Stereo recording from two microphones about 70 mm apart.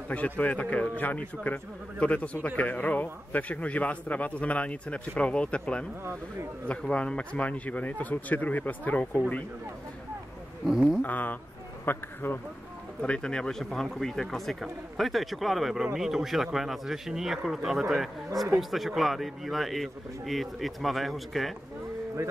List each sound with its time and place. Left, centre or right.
0.1 s a man's voice: left
10.7 s speech: centre
11.0 s a man's voice: left
13.0 s speech: centre